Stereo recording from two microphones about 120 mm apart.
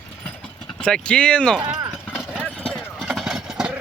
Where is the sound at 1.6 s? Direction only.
35° right (ahead or behind).